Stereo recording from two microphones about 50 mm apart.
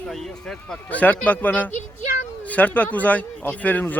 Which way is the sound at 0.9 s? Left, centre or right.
Left.